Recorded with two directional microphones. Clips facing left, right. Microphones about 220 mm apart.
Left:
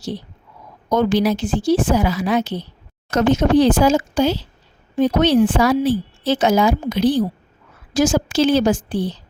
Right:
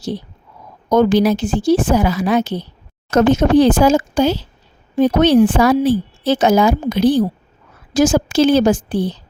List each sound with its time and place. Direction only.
0.9 s a woman's voice: 45° right (ahead or behind)